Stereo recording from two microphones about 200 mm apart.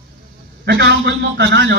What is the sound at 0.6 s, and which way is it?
A man's voice, 55° right (ahead or behind).